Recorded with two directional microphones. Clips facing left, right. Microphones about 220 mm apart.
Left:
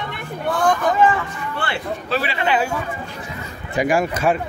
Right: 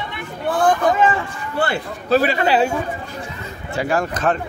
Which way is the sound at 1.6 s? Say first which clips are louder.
Right 5 dB; 40° right (ahead or behind).